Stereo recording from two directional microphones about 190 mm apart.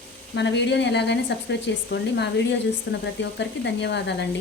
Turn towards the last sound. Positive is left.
turn(degrees=65)  # may be behind; listen again after turning